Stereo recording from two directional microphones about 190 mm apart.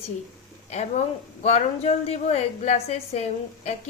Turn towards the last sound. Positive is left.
turn(degrees=35)  # may be behind; listen again after turning